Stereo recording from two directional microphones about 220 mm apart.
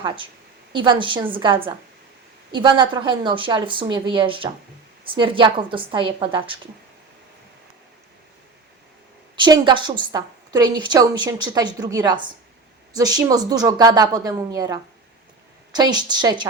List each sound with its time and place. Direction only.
0.7 s speech: 20° right (ahead or behind)
9.3 s a woman's voice: 20° right (ahead or behind)